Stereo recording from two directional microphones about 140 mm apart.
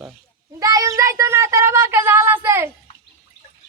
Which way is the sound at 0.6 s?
25° right (ahead or behind).